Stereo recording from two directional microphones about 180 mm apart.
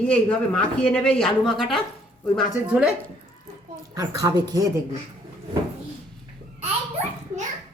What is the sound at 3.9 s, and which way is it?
Speech, 20° right (ahead or behind).